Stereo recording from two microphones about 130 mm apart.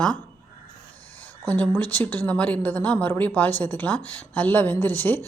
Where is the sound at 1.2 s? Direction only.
10° left (ahead or behind).